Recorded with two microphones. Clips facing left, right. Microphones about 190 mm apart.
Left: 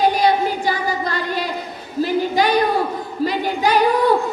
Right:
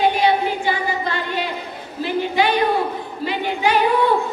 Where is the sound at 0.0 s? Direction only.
40° left (ahead or behind).